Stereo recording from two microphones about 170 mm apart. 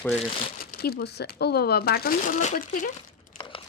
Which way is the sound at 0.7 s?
70° left (ahead or behind).